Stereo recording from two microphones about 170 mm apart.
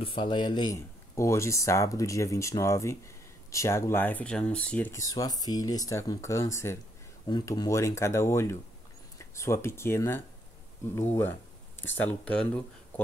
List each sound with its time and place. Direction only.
0.0 s speech: 30° left (ahead or behind); by 13.0 s 10° left (ahead or behind)